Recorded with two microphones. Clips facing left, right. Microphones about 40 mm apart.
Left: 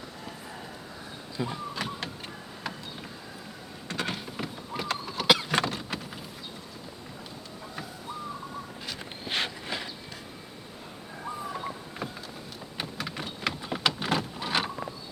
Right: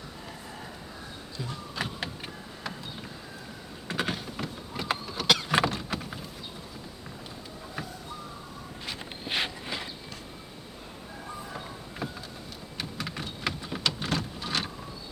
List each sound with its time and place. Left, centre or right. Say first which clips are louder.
1.4 s speech: left 6 dB; left
1.7 s vehicle: even; centre
3.8 s power windows: right 2 dB; centre
4.4 s power windows: left 1 dB; centre
5.0 s a sound: left 3 dB; centre
5.5 s vehicle: right 2 dB; centre
9.2 s a sound: even; centre
12.0 s vehicle: right 1 dB; centre
12.8 s a sound: left 1 dB; centre